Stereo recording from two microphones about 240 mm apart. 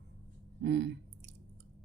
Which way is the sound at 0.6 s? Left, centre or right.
Right.